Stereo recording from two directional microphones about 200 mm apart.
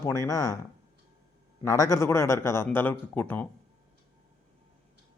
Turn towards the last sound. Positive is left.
turn(degrees=10)  # may be behind; listen again after turning